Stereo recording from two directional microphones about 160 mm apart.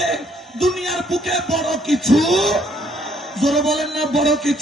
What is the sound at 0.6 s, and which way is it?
Music, centre (ahead or behind).